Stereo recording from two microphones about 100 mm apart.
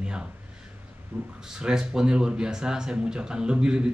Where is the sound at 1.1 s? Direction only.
20° right (ahead or behind).